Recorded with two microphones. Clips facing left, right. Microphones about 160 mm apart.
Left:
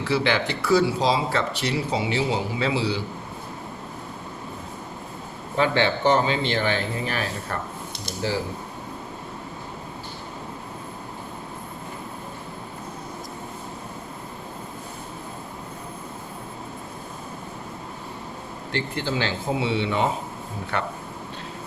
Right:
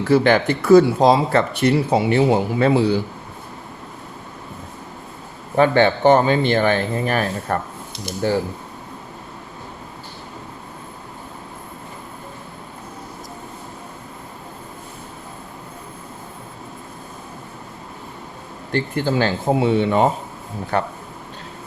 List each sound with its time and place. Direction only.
0.0 s speech: 50° right (ahead or behind)
5.5 s speech: 50° right (ahead or behind)
18.7 s speech: 45° right (ahead or behind)